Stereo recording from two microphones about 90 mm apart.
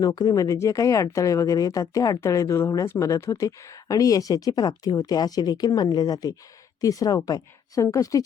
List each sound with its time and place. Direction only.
0.0 s speech: 50° left (ahead or behind)